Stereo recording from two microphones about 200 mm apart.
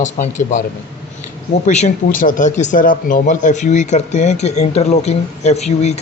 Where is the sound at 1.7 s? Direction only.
35° left (ahead or behind).